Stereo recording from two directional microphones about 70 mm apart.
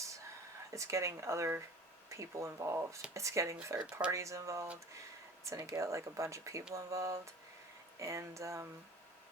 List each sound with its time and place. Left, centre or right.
0.7 s speech: right